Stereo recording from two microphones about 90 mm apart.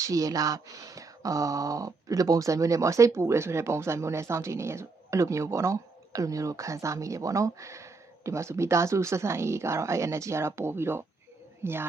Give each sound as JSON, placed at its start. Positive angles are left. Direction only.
{"t": 0.0, "sound": "speech", "side_deg": -40}